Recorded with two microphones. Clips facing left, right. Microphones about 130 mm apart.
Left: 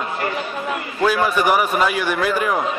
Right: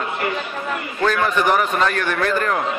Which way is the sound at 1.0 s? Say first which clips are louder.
Left 1 dB; 10° left (ahead or behind).